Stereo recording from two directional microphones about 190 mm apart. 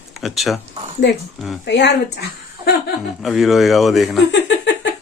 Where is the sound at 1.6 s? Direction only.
65° left (ahead or behind).